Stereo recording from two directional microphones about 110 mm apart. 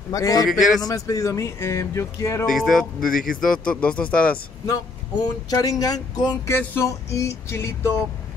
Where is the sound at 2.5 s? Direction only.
Centre (ahead or behind).